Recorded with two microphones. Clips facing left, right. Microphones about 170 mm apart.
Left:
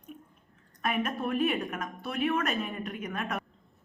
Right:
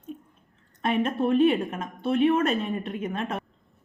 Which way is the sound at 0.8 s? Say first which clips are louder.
Right 6 dB; 30° right (ahead or behind).